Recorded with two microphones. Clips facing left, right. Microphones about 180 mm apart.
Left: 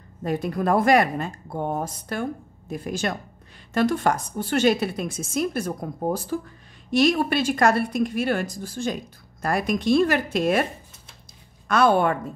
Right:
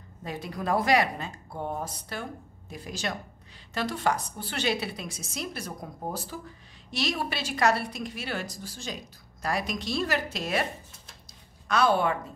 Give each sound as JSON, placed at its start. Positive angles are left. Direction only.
{"t": 0.2, "sound": "a woman's voice", "side_deg": 50}